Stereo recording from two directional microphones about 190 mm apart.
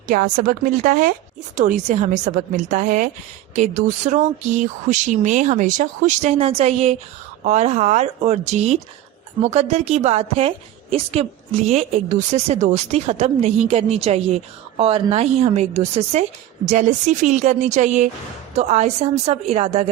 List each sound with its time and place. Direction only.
0.1 s a woman's voice: 45° right (ahead or behind)